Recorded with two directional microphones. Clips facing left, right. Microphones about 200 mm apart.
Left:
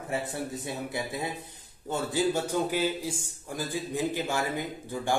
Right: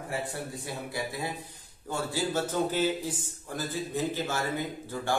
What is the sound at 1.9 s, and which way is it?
A man's voice, 15° left (ahead or behind).